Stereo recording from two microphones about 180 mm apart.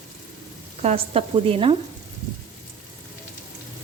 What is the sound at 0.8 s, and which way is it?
Speech, 35° right (ahead or behind).